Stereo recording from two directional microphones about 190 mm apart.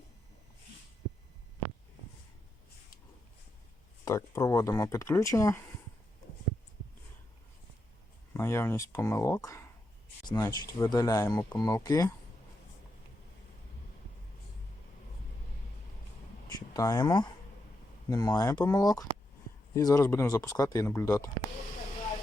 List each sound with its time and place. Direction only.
4.0 s speech: 15° left (ahead or behind)
8.3 s speech: 15° left (ahead or behind)
16.6 s speech: 20° left (ahead or behind)